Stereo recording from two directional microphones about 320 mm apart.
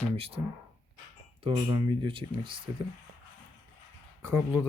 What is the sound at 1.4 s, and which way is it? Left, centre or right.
Speech, centre.